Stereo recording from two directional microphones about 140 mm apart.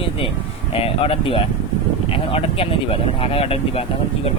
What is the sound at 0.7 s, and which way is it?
Speech, 40° left (ahead or behind).